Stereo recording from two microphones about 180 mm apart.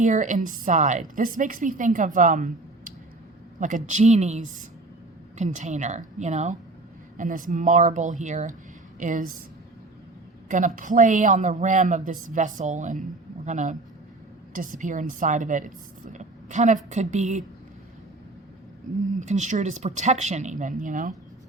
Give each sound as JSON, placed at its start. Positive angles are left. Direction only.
{"t": 0.0, "sound": "a woman's voice", "side_deg": -45}
{"t": 10.5, "sound": "a woman's voice", "side_deg": -45}
{"t": 19.2, "sound": "speech", "side_deg": -40}